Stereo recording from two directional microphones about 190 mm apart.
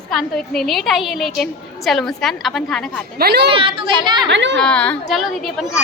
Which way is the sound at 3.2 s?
55° right (ahead or behind).